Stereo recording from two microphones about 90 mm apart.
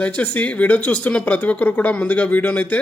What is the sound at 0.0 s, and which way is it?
Speech, 15° left (ahead or behind).